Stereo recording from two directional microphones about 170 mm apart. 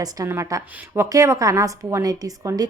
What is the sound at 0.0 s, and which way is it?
A woman's voice, 20° right (ahead or behind).